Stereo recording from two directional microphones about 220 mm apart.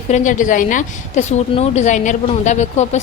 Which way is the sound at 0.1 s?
35° left (ahead or behind).